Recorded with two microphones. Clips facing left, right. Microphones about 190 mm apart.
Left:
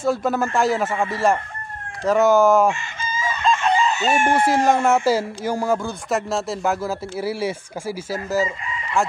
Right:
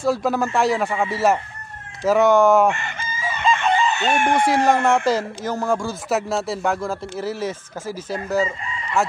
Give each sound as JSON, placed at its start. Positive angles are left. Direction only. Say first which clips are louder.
{"t": 0.0, "sound": "chicken", "louder": "even", "side_deg": 0}
{"t": 2.7, "sound": "chicken", "louder": "even", "side_deg": -60}
{"t": 3.6, "sound": "chicken", "louder": "even", "side_deg": 0}